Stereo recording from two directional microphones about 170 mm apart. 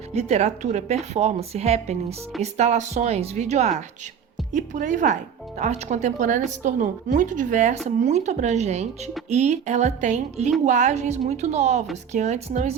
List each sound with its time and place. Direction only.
0.1 s speech: 40° right (ahead or behind)